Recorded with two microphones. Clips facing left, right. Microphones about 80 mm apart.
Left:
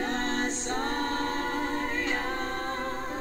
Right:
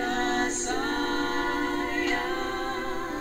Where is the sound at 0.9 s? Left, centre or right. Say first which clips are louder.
Right 2 dB; right.